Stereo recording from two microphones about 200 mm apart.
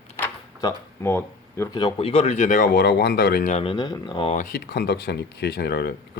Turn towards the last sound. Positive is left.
turn(degrees=55)  # may be behind; listen again after turning